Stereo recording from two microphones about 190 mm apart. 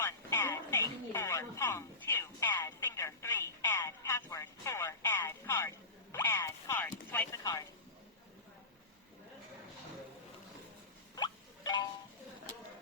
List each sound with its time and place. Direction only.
0.0 s radio: 15° left (ahead or behind)
7.1 s vehicle: 15° left (ahead or behind)
11.1 s music: 20° left (ahead or behind)